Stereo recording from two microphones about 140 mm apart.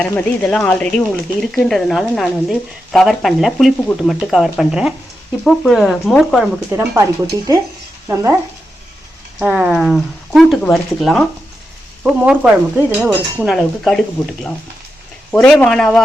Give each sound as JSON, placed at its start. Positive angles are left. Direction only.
{"t": 0.0, "sound": "speech", "side_deg": 10}
{"t": 8.0, "sound": "speech", "side_deg": -20}
{"t": 9.4, "sound": "speech", "side_deg": -5}
{"t": 15.3, "sound": "speech", "side_deg": 5}